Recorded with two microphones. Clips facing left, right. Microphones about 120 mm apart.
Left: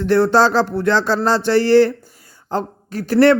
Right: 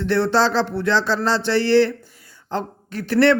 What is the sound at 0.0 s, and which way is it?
Speech, 45° left (ahead or behind).